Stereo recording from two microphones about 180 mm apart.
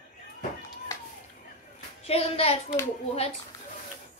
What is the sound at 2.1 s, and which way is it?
Speech, 35° left (ahead or behind).